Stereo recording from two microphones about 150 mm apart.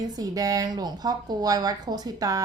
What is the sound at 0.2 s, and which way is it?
A woman's voice, 25° right (ahead or behind).